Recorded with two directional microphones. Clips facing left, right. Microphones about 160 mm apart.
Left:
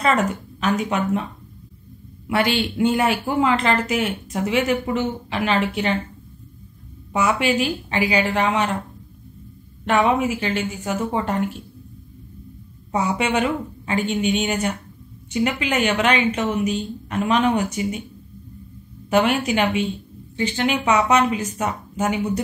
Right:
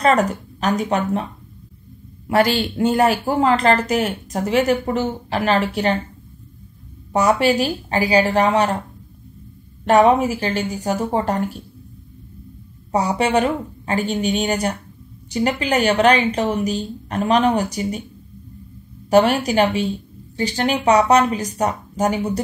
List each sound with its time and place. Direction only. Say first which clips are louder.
0.0 s speech: right 3 dB; 40° right (ahead or behind)
2.2 s speech: right 3 dB; 40° right (ahead or behind)
7.1 s speech: right 4 dB; 40° right (ahead or behind)
9.8 s speech: right 5 dB; 40° right (ahead or behind)
12.9 s speech: right 3 dB; 35° right (ahead or behind)
19.0 s speech: right 4 dB; 35° right (ahead or behind)